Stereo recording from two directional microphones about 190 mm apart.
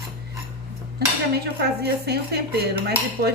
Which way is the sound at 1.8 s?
60° right (ahead or behind).